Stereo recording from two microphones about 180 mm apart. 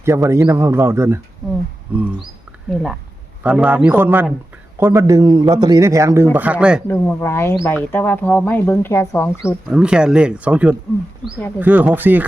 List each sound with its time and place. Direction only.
0.0 s a man's voice: 15° right (ahead or behind)
1.4 s a man's voice: centre (ahead or behind)
3.4 s a man's voice: 5° right (ahead or behind)
6.8 s speech: 15° left (ahead or behind)
9.6 s a man's voice: 5° right (ahead or behind)